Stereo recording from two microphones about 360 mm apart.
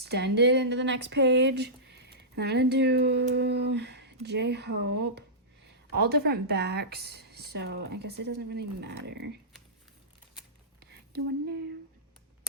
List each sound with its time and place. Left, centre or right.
0.0 s speech: right